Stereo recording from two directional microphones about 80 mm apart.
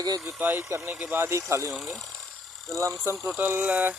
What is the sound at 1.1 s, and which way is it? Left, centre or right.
Speech, right.